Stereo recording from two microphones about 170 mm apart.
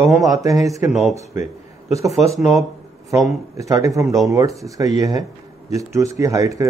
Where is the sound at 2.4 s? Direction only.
Centre (ahead or behind).